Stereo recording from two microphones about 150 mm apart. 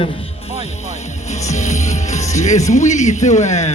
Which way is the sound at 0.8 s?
50° left (ahead or behind).